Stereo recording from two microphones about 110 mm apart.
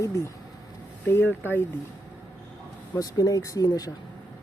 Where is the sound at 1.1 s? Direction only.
20° left (ahead or behind).